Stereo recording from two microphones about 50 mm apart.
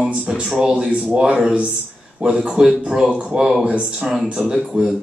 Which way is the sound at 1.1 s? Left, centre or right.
Right.